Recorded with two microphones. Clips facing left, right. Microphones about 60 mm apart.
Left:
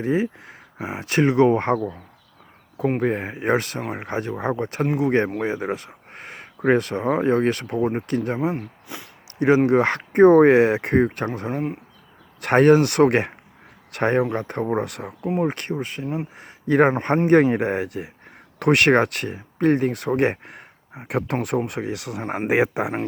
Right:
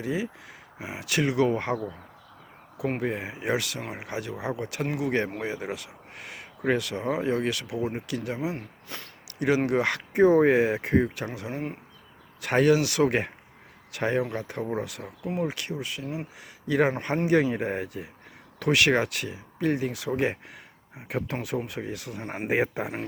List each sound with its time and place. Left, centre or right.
0.0 s speech: left
3.0 s speech: left
8.5 s speech: centre
9.6 s speech: left
10.1 s speech: left
12.4 s speech: left
15.4 s speech: left
18.6 s speech: left
21.7 s speech: left
22.2 s speech: left
22.4 s speech: left